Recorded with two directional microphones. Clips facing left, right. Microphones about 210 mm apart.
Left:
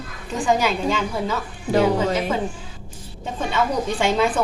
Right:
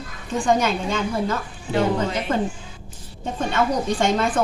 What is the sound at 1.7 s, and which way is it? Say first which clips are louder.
Speech: left 3 dB; 40° left (ahead or behind).